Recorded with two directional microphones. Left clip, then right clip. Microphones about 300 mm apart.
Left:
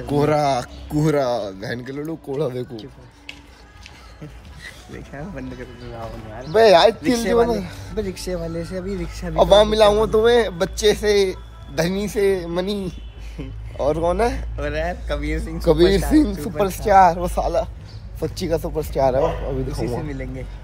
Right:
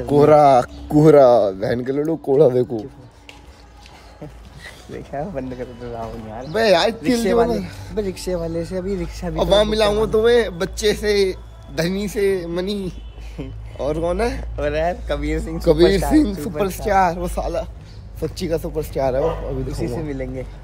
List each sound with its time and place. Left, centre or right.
0.1 s speech: centre
4.6 s speech: right
6.5 s a man's voice: centre
7.9 s speech: centre
9.4 s a man's voice: centre
13.4 s speech: centre
13.7 s a man's voice: centre
14.6 s speech: centre
15.6 s a man's voice: centre
20.0 s speech: centre